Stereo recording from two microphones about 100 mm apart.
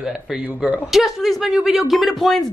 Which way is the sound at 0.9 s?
Centre (ahead or behind).